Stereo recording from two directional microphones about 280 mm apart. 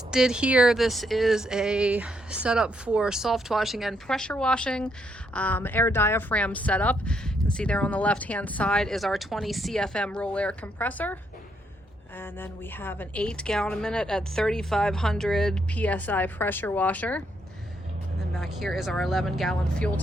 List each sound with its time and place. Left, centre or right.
0.1 s speech: centre
12.2 s speech: centre
18.3 s speech: centre